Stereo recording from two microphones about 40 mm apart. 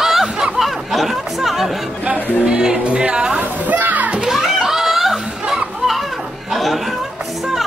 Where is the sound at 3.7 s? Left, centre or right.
Right.